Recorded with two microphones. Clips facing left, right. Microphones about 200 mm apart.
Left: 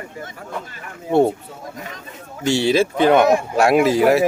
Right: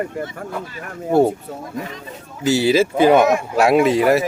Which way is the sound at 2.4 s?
5° right (ahead or behind).